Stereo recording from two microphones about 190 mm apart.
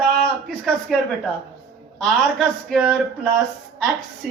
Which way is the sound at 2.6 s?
Centre (ahead or behind).